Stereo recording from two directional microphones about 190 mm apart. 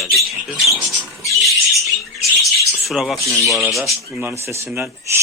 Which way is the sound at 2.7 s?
Centre (ahead or behind).